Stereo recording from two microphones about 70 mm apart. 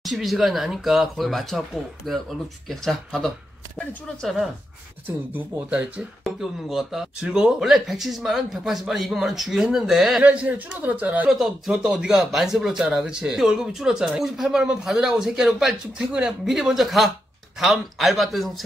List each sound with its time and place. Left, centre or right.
0.0 s speech: centre
5.0 s speech: right
6.2 s speech: centre
10.2 s speech: centre
11.3 s speech: centre